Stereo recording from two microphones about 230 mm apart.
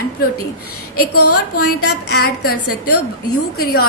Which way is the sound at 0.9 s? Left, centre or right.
Left.